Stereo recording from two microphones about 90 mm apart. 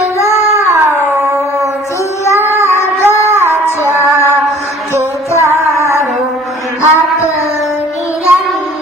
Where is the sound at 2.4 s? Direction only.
30° right (ahead or behind).